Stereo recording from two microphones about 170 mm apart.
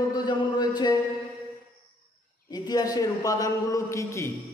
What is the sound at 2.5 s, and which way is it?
A man's voice, 25° left (ahead or behind).